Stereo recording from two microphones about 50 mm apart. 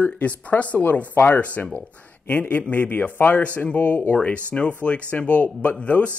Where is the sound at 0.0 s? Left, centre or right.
Left.